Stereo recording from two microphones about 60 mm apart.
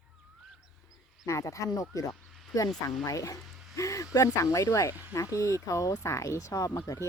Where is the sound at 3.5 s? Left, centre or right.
Centre.